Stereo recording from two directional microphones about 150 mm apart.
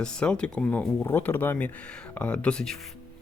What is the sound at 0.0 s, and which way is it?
Speech, 5° left (ahead or behind).